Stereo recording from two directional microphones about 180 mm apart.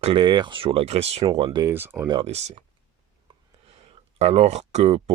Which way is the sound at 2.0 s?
30° right (ahead or behind).